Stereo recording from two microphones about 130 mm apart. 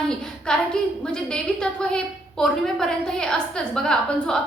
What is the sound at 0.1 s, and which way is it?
A woman's voice, 5° left (ahead or behind).